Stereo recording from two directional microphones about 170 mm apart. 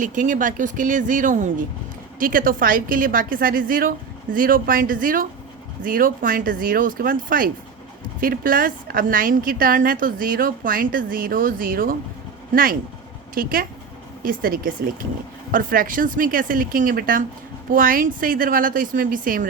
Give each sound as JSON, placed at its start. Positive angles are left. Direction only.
{"t": 0.0, "sound": "a woman's voice", "side_deg": -50}
{"t": 13.3, "sound": "a woman's voice", "side_deg": -55}